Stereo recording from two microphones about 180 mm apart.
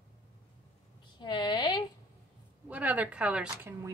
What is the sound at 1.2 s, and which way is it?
Speech, 25° left (ahead or behind).